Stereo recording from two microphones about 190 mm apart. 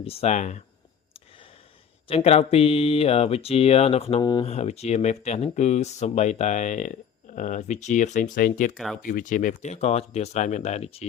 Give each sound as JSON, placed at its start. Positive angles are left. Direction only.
{"t": 0.0, "sound": "speech", "side_deg": 30}
{"t": 2.0, "sound": "speech", "side_deg": 30}
{"t": 4.5, "sound": "speech", "side_deg": 35}
{"t": 8.7, "sound": "speech", "side_deg": 0}
{"t": 9.0, "sound": "speech", "side_deg": 45}